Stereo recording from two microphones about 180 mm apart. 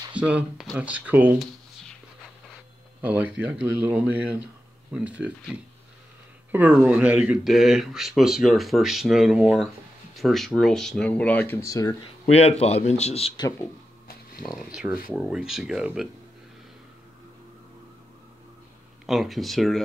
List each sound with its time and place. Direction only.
0.1 s speech: 5° right (ahead or behind)
3.0 s speech: 5° right (ahead or behind); by 11.9 s 15° left (ahead or behind)
12.4 s a man's voice: 35° left (ahead or behind)
13.4 s speech: 20° left (ahead or behind)
14.4 s speech: centre (ahead or behind)
19.0 s speech: centre (ahead or behind)